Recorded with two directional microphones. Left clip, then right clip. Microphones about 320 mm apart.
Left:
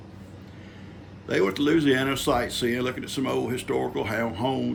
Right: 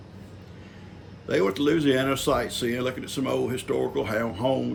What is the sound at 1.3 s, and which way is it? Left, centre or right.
Speech, centre.